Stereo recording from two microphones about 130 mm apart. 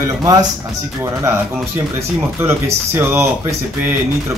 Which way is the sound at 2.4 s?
20° right (ahead or behind).